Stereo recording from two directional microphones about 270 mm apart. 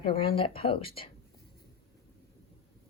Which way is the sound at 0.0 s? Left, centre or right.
Centre.